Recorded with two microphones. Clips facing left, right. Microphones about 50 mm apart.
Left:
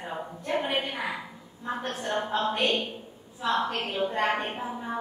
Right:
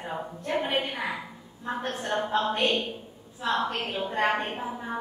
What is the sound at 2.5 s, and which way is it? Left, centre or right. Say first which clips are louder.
A woman's voice: right 1 dB; centre.